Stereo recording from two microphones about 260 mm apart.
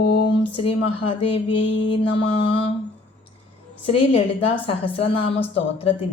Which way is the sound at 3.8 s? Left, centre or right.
Left.